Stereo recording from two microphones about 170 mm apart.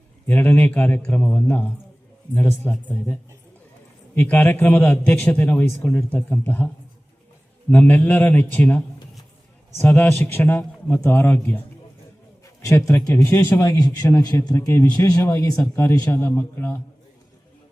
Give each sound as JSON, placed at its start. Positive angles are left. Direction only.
{"t": 0.3, "sound": "a man's voice", "side_deg": 10}
{"t": 7.7, "sound": "a man's voice", "side_deg": 10}
{"t": 13.2, "sound": "a man's voice", "side_deg": 15}